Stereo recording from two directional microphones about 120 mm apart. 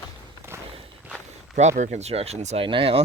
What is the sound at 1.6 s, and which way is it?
Speech, 85° right.